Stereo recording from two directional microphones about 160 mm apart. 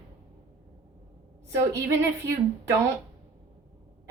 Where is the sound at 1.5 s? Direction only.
15° right (ahead or behind).